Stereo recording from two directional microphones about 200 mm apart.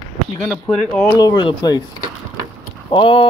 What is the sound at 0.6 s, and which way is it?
Speech, 10° left (ahead or behind).